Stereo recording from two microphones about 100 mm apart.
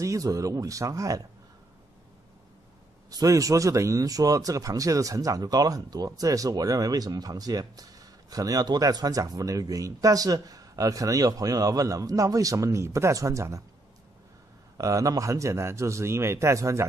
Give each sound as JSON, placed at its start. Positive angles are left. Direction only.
{"t": 0.0, "sound": "speech", "side_deg": -35}
{"t": 3.1, "sound": "speech", "side_deg": -35}
{"t": 14.8, "sound": "speech", "side_deg": -35}